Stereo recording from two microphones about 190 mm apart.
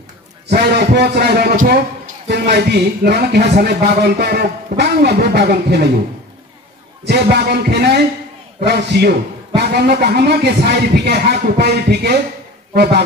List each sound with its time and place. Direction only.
0.5 s speech: 60° right (ahead or behind)
7.1 s speech: 60° right (ahead or behind)